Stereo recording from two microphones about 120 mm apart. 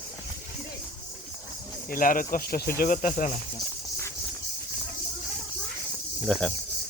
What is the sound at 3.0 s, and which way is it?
Speech, 90° left.